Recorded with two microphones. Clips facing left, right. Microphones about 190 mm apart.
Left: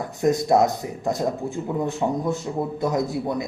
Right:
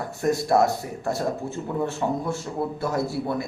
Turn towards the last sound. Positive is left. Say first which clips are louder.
# left 2 dB
turn(degrees=15)  # may be behind; listen again after turning